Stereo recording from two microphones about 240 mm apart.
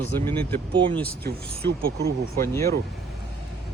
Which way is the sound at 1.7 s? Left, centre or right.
Right.